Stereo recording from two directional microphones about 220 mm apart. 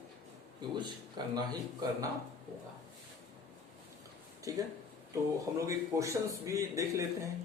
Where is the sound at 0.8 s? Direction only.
20° right (ahead or behind).